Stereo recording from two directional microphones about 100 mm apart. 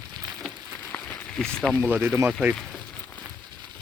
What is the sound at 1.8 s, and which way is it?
Speech, 25° right (ahead or behind).